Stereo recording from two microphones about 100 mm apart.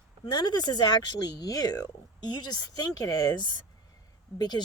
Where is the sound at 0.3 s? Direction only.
45° left (ahead or behind).